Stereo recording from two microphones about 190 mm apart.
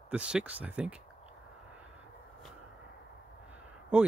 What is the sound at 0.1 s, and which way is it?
Speech, 5° right (ahead or behind).